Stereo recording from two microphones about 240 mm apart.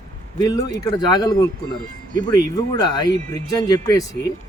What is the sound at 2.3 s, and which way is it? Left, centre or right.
Speech, centre.